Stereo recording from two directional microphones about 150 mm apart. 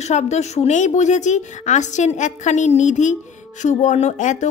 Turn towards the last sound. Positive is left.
turn(degrees=55)  # may be behind; listen again after turning